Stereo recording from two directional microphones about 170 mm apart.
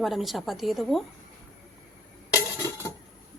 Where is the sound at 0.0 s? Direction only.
Centre (ahead or behind).